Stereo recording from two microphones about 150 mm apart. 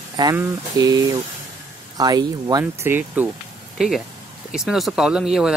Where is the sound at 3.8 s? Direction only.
Centre (ahead or behind).